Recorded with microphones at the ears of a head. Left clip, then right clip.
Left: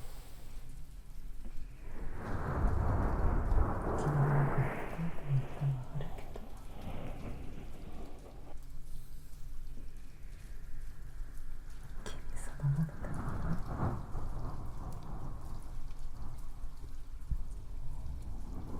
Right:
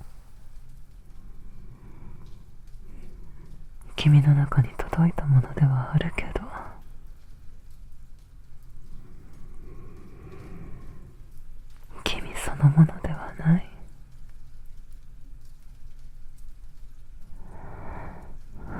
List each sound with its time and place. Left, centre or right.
2.1 s a sound: left
4.0 s speech: right
6.8 s rain: left
9.6 s a sound: right
11.9 s whispering: right
13.7 s rain: left
17.4 s vehicle: right